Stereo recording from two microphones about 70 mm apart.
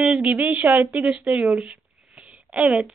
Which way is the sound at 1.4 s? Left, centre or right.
Centre.